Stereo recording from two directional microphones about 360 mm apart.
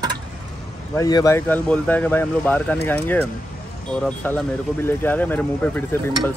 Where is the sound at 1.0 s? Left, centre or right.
Centre.